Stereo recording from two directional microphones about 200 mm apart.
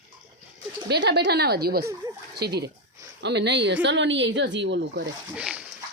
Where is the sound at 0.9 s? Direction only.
55° right (ahead or behind).